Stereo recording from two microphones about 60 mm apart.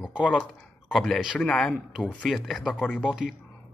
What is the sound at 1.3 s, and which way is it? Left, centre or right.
Speech, centre.